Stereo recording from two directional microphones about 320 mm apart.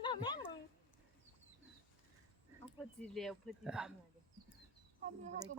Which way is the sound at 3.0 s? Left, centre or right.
Centre.